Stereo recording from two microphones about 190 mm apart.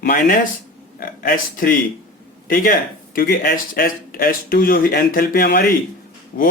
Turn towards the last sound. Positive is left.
turn(degrees=50)  # may be behind; listen again after turning